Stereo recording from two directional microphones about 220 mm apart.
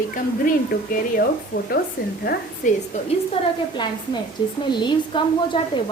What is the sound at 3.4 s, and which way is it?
Speech, 25° left (ahead or behind).